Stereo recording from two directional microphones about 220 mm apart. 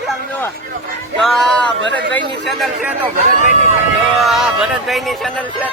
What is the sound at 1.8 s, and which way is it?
Speech, 55° right (ahead or behind).